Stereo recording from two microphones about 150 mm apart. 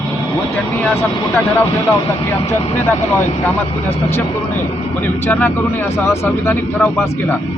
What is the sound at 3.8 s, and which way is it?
Speech, 45° left (ahead or behind).